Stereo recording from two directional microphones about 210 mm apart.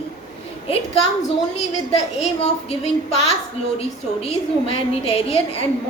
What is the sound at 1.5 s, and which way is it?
A woman's voice, 30° left (ahead or behind).